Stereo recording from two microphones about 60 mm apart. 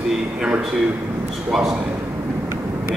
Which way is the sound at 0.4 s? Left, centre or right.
Centre.